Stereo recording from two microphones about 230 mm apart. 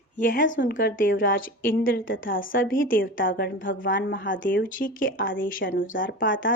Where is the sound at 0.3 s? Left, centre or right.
Left.